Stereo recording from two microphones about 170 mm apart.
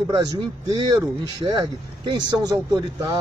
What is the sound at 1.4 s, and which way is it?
Speech, 25° right (ahead or behind).